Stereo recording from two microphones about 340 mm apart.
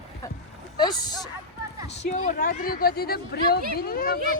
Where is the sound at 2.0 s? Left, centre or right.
Left.